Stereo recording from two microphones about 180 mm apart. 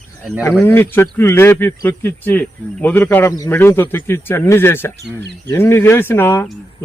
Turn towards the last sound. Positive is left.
turn(degrees=15)  # may be behind; listen again after turning